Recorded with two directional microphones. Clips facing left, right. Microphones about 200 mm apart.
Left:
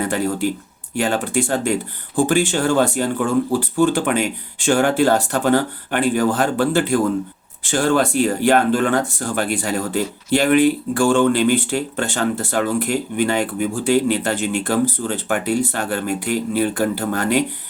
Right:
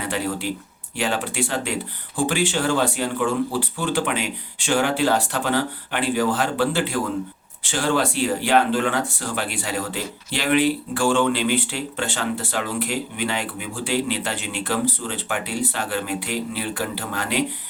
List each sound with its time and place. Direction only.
0.1 s speech: 45° left (ahead or behind)